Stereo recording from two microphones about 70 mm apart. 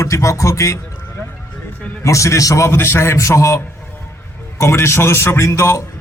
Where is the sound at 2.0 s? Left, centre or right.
Left.